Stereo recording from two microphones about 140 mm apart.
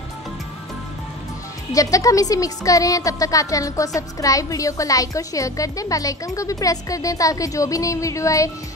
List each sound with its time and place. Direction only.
1.7 s a woman's voice: 25° left (ahead or behind)